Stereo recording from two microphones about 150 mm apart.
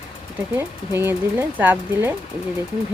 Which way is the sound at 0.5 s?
15° right (ahead or behind).